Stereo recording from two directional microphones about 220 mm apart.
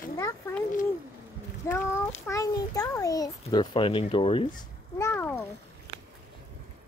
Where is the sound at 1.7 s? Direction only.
10° left (ahead or behind).